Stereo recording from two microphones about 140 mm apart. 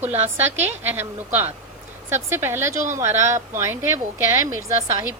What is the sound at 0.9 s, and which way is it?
A woman's voice, 15° right (ahead or behind).